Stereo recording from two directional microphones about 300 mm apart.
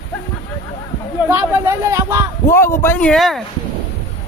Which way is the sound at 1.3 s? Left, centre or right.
Centre.